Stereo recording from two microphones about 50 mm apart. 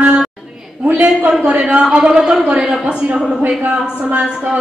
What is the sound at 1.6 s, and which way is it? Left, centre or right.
A woman's voice, centre.